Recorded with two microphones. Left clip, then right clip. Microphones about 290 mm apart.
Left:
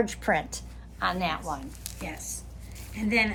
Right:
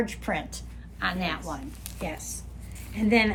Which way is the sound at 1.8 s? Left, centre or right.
Centre.